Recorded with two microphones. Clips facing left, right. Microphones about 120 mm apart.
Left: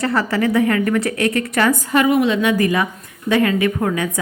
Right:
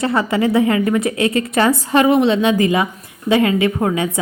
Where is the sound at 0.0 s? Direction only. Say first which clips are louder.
Right 2 dB; 20° right (ahead or behind).